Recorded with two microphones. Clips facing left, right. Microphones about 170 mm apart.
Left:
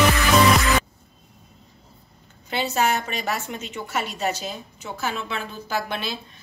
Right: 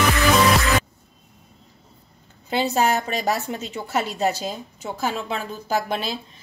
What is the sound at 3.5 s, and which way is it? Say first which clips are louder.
A woman's voice: right 3 dB; 35° right (ahead or behind).